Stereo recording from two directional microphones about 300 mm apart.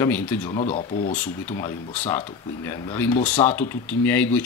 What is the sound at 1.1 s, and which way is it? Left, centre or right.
Speech, centre.